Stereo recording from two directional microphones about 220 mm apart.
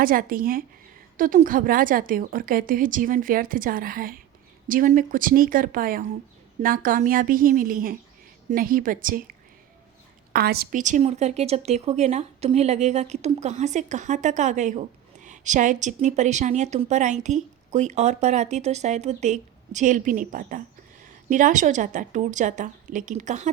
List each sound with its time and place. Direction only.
0.0 s speech: 40° right (ahead or behind)
10.3 s speech: 45° right (ahead or behind)